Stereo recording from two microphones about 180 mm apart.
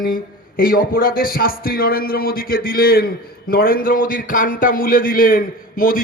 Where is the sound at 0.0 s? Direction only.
50° left (ahead or behind).